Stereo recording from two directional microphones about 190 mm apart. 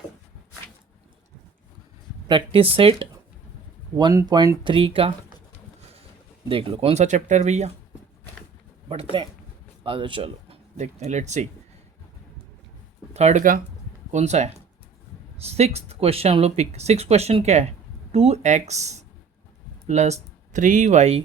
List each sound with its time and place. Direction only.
2.2 s speech: 25° right (ahead or behind)
3.9 s speech: 20° right (ahead or behind)
6.5 s speech: 30° right (ahead or behind)
9.2 s speech: 25° right (ahead or behind)
13.1 s speech: 40° right (ahead or behind)